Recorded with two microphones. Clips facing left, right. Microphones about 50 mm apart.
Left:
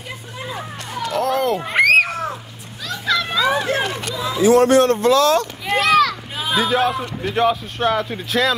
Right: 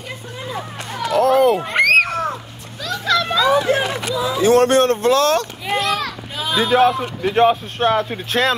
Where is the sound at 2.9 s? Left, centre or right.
Centre.